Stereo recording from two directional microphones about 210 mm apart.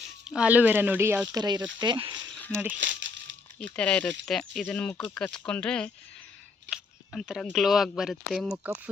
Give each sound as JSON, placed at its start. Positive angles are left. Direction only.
{"t": 0.3, "sound": "speech", "side_deg": -5}
{"t": 2.7, "sound": "crumpling", "side_deg": -60}
{"t": 3.8, "sound": "speech", "side_deg": 5}